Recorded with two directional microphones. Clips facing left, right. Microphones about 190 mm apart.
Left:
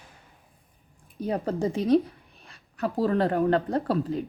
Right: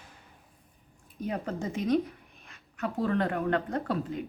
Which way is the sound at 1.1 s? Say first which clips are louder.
Left 5 dB; 35° left (ahead or behind).